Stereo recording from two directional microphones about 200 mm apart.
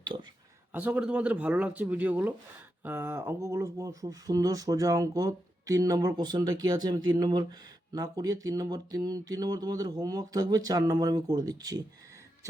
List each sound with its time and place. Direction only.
0.0 s speech: 25° right (ahead or behind)
0.7 s speech: 5° right (ahead or behind)
7.9 s a sound: 20° right (ahead or behind)